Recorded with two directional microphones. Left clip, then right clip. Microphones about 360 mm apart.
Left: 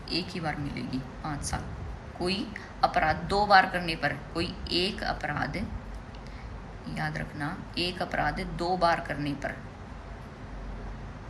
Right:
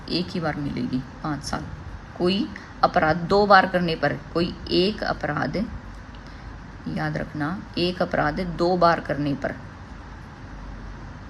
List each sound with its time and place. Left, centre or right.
0.1 s speech: right
6.9 s speech: right